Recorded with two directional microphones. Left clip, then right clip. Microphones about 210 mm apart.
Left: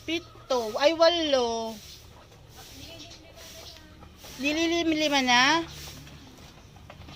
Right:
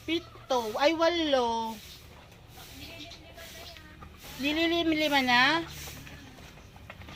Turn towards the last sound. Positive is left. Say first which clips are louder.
# left 2 dB
turn(degrees=15)  # may be behind; listen again after turning